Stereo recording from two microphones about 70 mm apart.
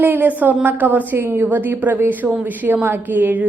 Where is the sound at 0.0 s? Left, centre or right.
Right.